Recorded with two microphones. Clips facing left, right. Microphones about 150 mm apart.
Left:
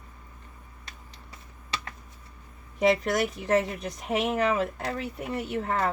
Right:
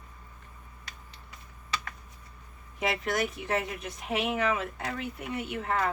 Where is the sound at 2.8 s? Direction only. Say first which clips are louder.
Left 6 dB; 40° left (ahead or behind).